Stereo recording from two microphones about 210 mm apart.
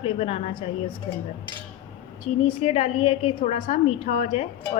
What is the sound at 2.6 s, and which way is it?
A woman's voice, 30° left (ahead or behind).